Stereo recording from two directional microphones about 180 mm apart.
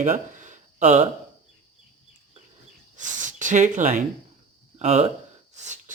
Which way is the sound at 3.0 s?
45° right (ahead or behind).